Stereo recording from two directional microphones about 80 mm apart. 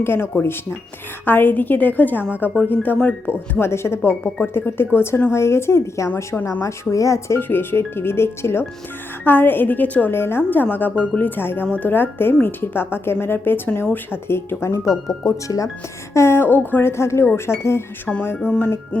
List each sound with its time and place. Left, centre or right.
0.0 s speech: left
14.8 s speech: centre
15.4 s speech: left
16.1 s speech: left
18.3 s music: centre